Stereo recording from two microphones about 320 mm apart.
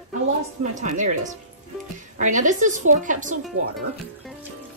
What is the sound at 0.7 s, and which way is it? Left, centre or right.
Speech, right.